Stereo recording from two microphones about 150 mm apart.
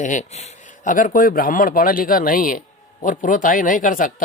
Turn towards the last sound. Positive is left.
turn(degrees=65)  # may be behind; listen again after turning